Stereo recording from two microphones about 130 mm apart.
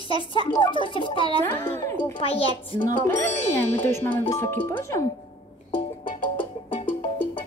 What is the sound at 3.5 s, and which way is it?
Speech, 15° left (ahead or behind).